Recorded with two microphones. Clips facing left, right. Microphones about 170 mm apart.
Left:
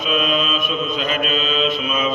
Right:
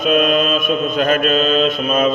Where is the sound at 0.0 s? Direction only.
50° right (ahead or behind).